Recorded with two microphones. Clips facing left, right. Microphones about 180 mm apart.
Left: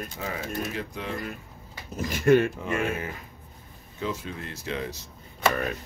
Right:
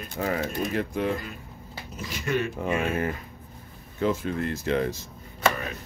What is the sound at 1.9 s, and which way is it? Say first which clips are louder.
Speech: left 9 dB; 50° left (ahead or behind).